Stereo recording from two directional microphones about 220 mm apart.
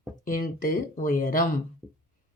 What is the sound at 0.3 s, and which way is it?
Speech, 40° left (ahead or behind).